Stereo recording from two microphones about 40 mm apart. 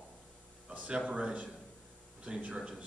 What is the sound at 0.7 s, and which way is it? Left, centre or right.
Speech, right.